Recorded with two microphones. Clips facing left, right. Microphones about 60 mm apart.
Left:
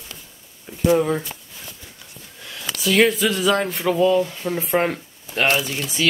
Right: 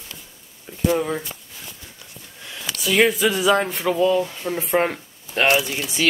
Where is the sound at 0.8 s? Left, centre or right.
Centre.